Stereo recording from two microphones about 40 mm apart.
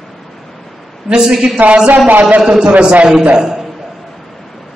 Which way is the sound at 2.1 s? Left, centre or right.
Right.